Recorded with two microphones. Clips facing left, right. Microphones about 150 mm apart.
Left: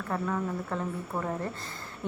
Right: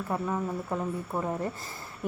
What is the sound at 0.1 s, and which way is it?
Speech, 15° right (ahead or behind).